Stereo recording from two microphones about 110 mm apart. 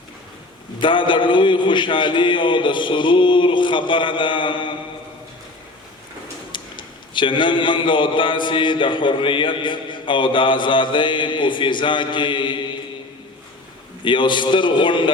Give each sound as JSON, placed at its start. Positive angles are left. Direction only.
{"t": 0.8, "sound": "a man's voice", "side_deg": 50}
{"t": 6.5, "sound": "a man's voice", "side_deg": 45}
{"t": 14.0, "sound": "a man's voice", "side_deg": 45}